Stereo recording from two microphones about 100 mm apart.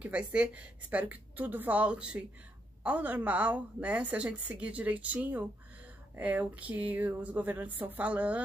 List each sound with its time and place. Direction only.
0.0 s a woman's voice: 10° right (ahead or behind)